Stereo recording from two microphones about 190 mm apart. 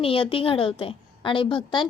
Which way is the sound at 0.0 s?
30° left (ahead or behind).